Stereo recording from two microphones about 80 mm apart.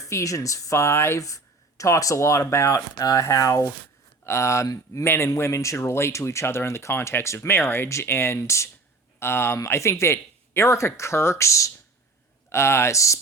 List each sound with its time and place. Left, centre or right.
0.0 s speech: left
5.0 s speech: left